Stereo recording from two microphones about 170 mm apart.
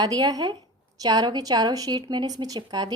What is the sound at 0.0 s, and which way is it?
A woman's voice, 20° right (ahead or behind).